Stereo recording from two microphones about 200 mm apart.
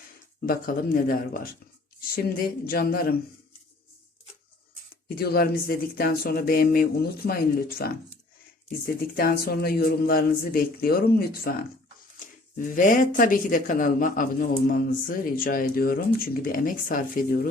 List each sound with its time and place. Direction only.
0.4 s speech: 45° left (ahead or behind)
5.0 s speech: 50° left (ahead or behind)
9.0 s speech: 50° left (ahead or behind)
12.5 s speech: 40° left (ahead or behind)